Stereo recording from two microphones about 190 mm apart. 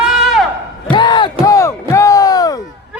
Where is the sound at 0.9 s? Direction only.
25° left (ahead or behind).